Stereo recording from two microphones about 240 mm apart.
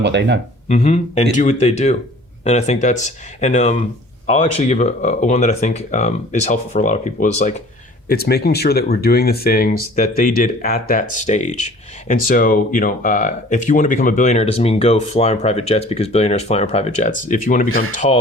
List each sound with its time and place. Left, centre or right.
0.0 s speech: right
0.7 s speech: left